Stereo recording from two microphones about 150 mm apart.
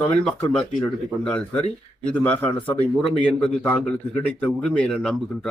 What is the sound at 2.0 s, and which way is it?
Speech, 10° left (ahead or behind).